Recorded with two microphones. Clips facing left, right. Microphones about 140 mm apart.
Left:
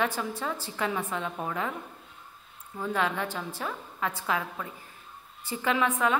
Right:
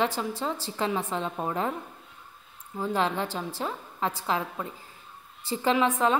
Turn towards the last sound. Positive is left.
turn(degrees=-30)  # may be behind; listen again after turning